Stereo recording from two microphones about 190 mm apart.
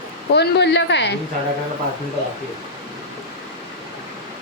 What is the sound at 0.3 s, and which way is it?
Speech, 65° left (ahead or behind).